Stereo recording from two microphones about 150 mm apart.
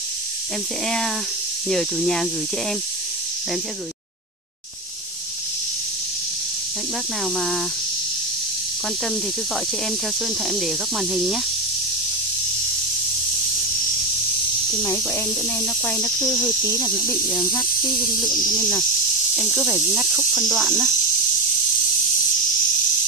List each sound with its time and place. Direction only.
0.8 s speech: centre (ahead or behind)
7.3 s speech: centre (ahead or behind)
10.2 s speech: centre (ahead or behind)
14.8 s speech: 15° left (ahead or behind)
16.4 s speech: 25° left (ahead or behind)
19.3 s speech: 10° right (ahead or behind)